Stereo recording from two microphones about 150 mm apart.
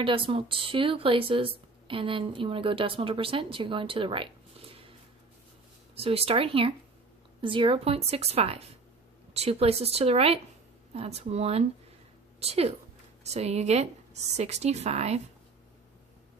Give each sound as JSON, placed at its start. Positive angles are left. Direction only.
{"t": 0.0, "sound": "speech", "side_deg": -35}
{"t": 5.9, "sound": "a woman's voice", "side_deg": -40}